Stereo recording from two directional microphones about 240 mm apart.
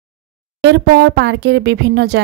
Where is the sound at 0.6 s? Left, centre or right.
Right.